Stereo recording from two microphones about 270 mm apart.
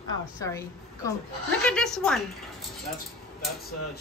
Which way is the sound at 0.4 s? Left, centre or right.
Centre.